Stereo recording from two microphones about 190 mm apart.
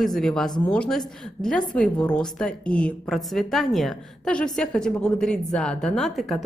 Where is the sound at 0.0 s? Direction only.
Centre (ahead or behind).